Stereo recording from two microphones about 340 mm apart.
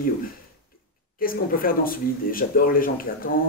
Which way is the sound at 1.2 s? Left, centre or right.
Left.